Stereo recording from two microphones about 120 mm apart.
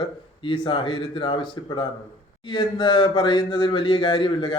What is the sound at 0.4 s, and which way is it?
A man's voice, 45° left (ahead or behind).